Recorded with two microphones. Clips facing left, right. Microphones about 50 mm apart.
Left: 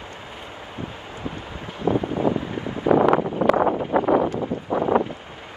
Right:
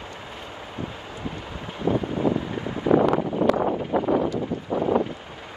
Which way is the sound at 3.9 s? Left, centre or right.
Left.